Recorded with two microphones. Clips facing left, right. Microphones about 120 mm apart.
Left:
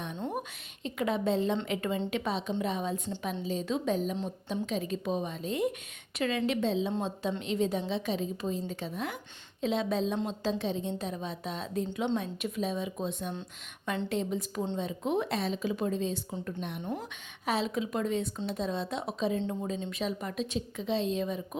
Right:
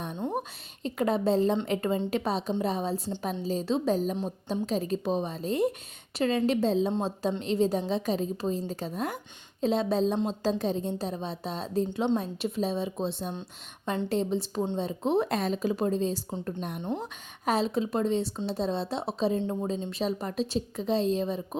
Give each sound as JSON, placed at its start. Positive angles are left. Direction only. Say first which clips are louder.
{"t": 0.3, "sound": "a woman's voice", "louder": "right 4 dB", "side_deg": -40}
{"t": 15.3, "sound": "a woman's voice", "louder": "right 3 dB", "side_deg": -45}